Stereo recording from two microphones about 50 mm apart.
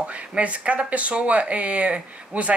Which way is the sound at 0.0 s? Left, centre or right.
Right.